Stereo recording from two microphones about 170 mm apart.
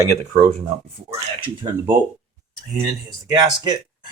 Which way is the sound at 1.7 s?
15° right (ahead or behind).